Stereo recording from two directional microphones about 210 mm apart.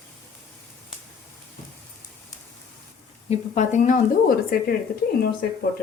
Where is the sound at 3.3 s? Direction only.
35° left (ahead or behind).